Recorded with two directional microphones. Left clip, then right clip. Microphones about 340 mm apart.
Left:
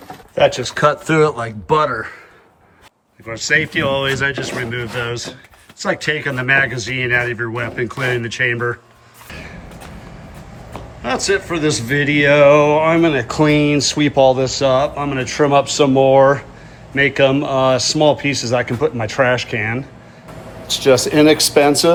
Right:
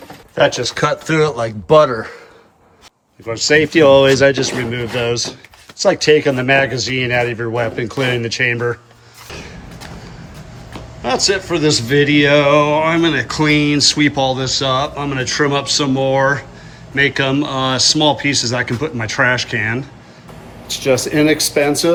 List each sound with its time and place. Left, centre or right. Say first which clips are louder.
0.3 s speech: even; centre
3.2 s speech: right 3 dB; centre
11.0 s speech: right 2 dB; centre